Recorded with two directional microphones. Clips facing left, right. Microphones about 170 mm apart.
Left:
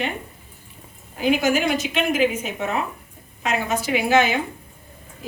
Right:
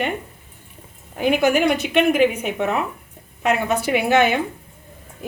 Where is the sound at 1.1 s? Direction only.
55° right (ahead or behind).